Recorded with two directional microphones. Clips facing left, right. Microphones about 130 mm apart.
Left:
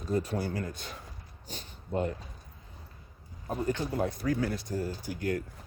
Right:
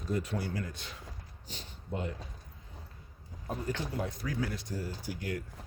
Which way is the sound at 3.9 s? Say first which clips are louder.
Left 6 dB; 50° left (ahead or behind).